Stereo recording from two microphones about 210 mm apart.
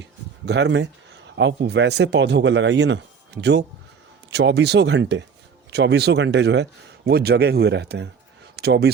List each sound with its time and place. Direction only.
0.4 s speech: 55° right (ahead or behind)